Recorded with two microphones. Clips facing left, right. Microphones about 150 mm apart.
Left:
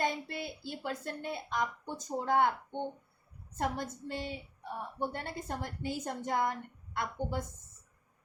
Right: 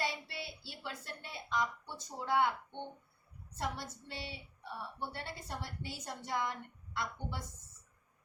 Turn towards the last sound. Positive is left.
turn(degrees=50)  # may be behind; listen again after turning